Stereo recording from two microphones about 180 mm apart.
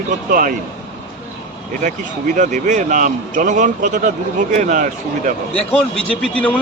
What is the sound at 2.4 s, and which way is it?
Speech, 45° right (ahead or behind).